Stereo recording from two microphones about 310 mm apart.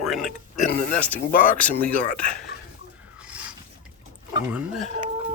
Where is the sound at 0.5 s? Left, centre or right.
Left.